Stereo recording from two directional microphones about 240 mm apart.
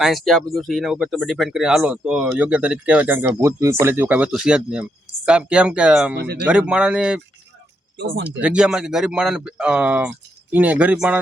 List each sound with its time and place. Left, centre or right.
0.0 s speech: centre
6.1 s speech: right
6.4 s speech: centre
8.4 s speech: centre